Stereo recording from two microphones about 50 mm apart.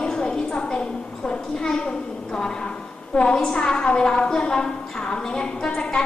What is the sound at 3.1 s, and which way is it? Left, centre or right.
A woman's voice, left.